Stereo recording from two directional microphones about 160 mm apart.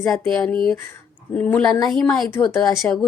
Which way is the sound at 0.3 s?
5° left (ahead or behind).